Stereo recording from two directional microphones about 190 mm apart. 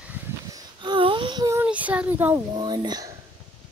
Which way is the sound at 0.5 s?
25° right (ahead or behind).